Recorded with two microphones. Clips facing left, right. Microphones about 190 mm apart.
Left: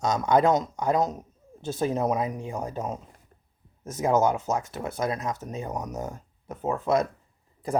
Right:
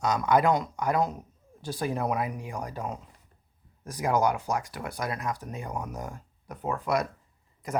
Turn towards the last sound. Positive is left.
turn(degrees=30)  # may be behind; listen again after turning